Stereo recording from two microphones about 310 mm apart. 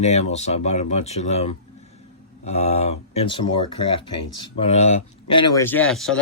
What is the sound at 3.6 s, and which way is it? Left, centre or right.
Speech, left.